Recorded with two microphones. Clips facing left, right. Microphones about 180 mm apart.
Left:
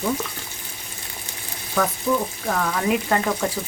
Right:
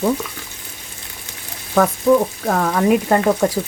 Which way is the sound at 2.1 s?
75° right (ahead or behind).